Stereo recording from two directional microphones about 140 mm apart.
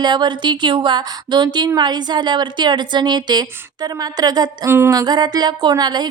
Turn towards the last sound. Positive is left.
turn(degrees=-30)  # may be behind; listen again after turning